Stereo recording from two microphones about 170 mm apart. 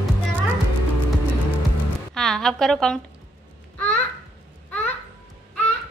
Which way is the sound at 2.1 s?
Centre (ahead or behind).